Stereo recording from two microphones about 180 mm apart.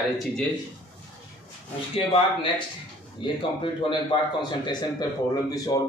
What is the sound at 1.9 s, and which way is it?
Speech, 30° left (ahead or behind).